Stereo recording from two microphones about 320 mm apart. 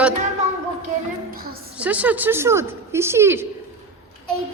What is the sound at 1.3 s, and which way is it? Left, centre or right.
Speech, right.